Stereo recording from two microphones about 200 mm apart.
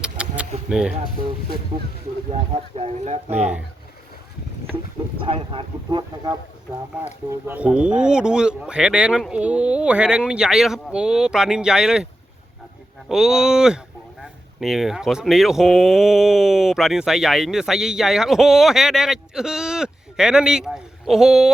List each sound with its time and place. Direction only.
0.0 s a sound: 5° right (ahead or behind)
0.7 s speech: 5° right (ahead or behind)
2.3 s speech: 30° right (ahead or behind)
4.7 s speech: 25° right (ahead or behind)
6.9 s speech: 10° right (ahead or behind)
13.1 s speech: 5° right (ahead or behind)